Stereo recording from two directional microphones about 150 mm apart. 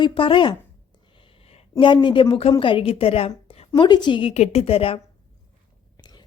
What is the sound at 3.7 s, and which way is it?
A woman's voice, 30° left (ahead or behind).